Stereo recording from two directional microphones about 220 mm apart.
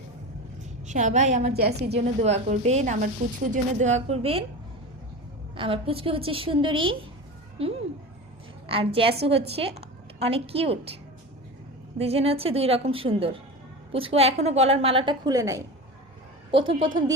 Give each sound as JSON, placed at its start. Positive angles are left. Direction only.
{"t": 0.9, "sound": "a woman's voice", "side_deg": -35}
{"t": 1.5, "sound": "a woman's voice", "side_deg": -45}
{"t": 2.2, "sound": "a woman's voice", "side_deg": -30}
{"t": 5.5, "sound": "a woman's voice", "side_deg": -25}
{"t": 11.9, "sound": "a woman's voice", "side_deg": -25}